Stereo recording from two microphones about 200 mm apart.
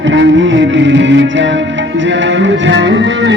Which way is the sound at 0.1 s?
65° right (ahead or behind).